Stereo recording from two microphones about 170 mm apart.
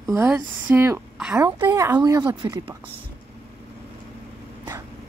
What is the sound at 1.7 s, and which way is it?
Speech, 20° right (ahead or behind).